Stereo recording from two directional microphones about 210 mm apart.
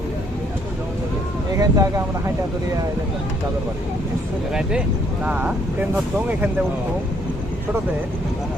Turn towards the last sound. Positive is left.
turn(degrees=-10)  # may be behind; listen again after turning